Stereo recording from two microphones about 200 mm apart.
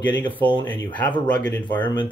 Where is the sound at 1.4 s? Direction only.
20° left (ahead or behind).